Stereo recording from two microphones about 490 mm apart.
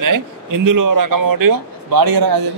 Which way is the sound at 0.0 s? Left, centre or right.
Right.